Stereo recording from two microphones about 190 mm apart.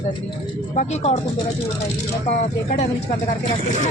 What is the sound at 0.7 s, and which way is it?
Speech, 35° left (ahead or behind).